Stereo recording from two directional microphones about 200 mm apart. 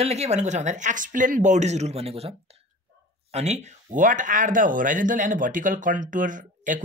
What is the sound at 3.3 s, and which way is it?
Speech, 35° right (ahead or behind).